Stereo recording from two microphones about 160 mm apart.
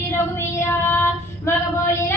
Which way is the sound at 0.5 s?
15° left (ahead or behind).